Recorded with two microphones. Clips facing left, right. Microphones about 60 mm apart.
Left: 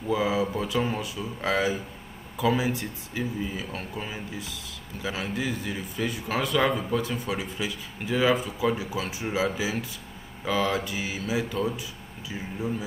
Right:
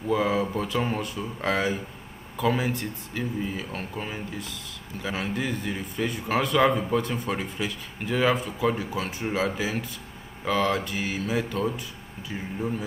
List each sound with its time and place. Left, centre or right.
0.1 s speech: centre
0.7 s speech: centre